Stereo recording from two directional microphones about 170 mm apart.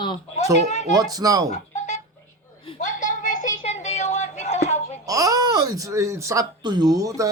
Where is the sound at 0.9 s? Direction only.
20° right (ahead or behind).